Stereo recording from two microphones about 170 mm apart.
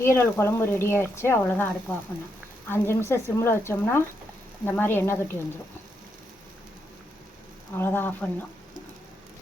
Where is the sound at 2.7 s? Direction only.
15° left (ahead or behind).